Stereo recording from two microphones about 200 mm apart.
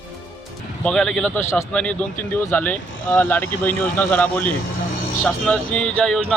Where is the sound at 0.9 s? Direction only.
5° left (ahead or behind).